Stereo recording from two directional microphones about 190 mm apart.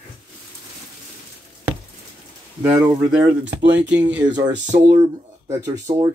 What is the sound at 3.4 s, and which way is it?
Speech, 70° right (ahead or behind).